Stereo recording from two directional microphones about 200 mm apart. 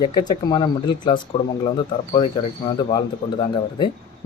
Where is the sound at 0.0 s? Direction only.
20° left (ahead or behind).